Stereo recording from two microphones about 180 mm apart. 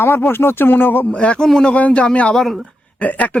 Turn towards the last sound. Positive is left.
turn(degrees=10)  # may be behind; listen again after turning